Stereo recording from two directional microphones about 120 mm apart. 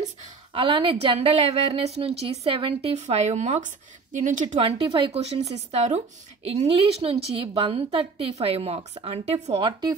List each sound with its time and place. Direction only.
0.5 s a woman's voice: 45° right (ahead or behind)
3.0 s speech: 70° right (ahead or behind); by 4.6 s 90° right
4.6 s a woman's voice: 50° right (ahead or behind)
9.6 s speech: 35° right (ahead or behind)